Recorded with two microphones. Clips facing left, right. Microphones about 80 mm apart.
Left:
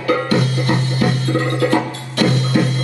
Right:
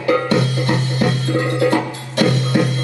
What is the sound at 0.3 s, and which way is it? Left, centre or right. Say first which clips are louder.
Music: even; right.